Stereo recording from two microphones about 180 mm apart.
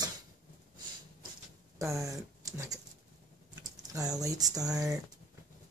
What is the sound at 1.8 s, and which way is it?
Speech, 15° right (ahead or behind).